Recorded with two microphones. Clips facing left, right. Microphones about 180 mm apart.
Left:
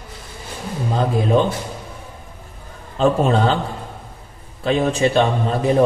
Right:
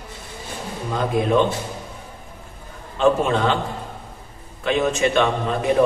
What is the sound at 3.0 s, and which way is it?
Speech, 35° left (ahead or behind).